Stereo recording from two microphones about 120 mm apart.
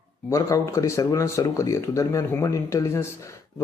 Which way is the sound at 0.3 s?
25° left (ahead or behind).